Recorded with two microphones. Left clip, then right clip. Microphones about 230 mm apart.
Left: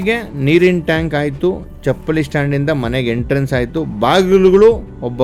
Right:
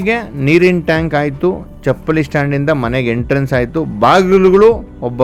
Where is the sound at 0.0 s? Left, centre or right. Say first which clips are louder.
Right 1 dB; centre.